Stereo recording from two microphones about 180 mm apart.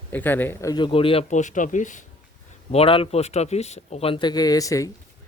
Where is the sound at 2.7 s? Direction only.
30° left (ahead or behind).